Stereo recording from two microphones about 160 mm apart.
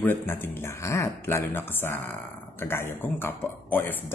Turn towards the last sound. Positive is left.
turn(degrees=15)  # may be behind; listen again after turning